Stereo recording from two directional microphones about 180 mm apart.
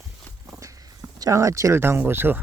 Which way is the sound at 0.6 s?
20° right (ahead or behind).